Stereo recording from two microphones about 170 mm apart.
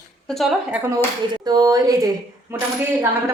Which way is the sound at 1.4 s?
20° right (ahead or behind).